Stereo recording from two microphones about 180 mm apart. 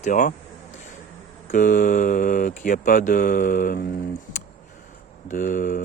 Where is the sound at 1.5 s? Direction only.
45° left (ahead or behind).